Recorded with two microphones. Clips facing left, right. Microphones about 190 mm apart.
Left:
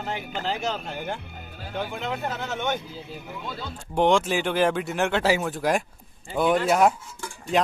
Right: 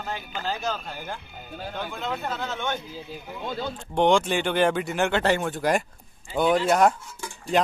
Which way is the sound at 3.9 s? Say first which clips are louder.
Even; centre (ahead or behind).